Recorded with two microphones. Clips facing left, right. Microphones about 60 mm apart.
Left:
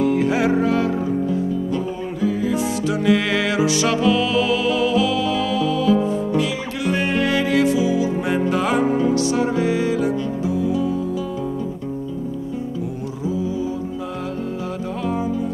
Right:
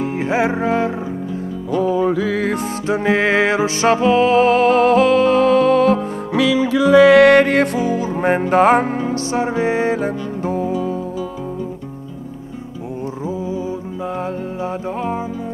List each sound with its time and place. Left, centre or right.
0.0 s music: right
2.9 s music: right
7.1 s music: right